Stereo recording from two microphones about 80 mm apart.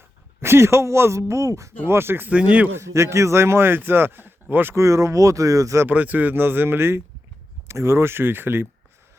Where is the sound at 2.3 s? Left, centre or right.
Centre.